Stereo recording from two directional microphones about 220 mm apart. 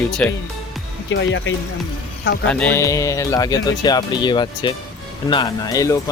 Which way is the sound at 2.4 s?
10° left (ahead or behind).